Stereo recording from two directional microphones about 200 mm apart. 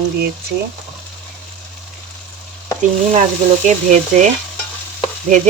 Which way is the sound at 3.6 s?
40° right (ahead or behind).